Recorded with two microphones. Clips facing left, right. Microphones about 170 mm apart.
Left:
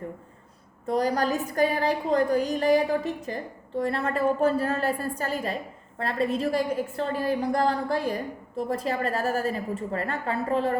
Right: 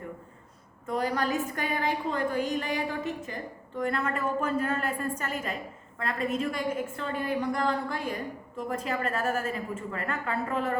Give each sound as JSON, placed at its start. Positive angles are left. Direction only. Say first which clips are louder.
{"t": 0.9, "sound": "a woman's voice", "louder": "left 4 dB", "side_deg": 35}